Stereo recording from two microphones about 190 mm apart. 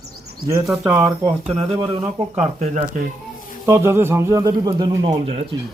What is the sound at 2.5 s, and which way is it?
Speech, 35° right (ahead or behind).